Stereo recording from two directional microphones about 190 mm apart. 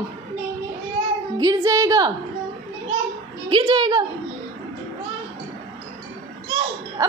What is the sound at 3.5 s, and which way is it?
Child singing, 25° right (ahead or behind).